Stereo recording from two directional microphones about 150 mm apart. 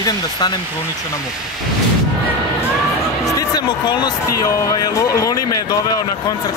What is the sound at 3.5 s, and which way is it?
Speech, 30° left (ahead or behind).